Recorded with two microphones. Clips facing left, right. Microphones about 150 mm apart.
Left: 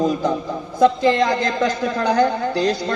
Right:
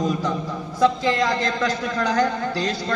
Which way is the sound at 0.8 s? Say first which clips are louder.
Left 4 dB; 35° left (ahead or behind).